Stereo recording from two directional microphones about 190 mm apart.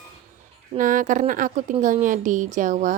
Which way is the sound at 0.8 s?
45° right (ahead or behind).